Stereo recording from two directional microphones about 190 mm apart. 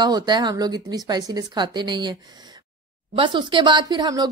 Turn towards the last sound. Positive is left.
turn(degrees=-20)  # may be behind; listen again after turning